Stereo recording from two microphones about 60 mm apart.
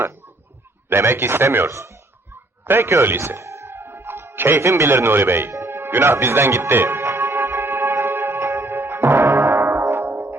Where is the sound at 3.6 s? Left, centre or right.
Right.